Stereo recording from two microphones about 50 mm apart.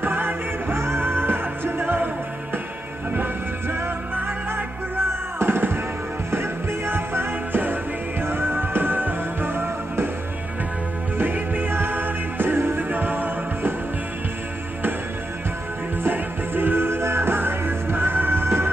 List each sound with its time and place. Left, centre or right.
0.0 s music: right
3.1 s music: right
11.1 s music: right
16.0 s music: right